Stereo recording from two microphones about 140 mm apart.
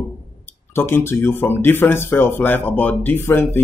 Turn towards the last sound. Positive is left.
turn(degrees=15)  # may be behind; listen again after turning